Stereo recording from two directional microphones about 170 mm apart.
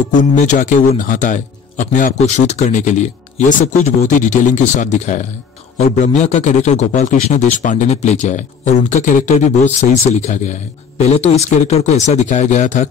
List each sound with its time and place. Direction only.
0.2 s speech: 50° left (ahead or behind)